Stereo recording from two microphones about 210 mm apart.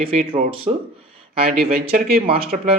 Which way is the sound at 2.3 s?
25° right (ahead or behind).